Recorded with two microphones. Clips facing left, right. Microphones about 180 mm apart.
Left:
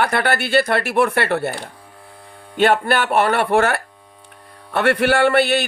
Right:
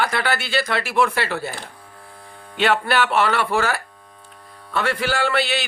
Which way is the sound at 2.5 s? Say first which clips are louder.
Left 3 dB; 50° left (ahead or behind).